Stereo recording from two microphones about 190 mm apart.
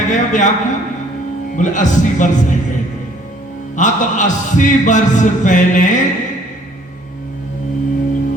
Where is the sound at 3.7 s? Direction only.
40° left (ahead or behind).